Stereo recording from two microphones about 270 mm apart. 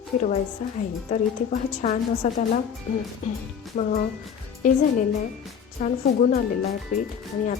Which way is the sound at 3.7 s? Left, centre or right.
Left.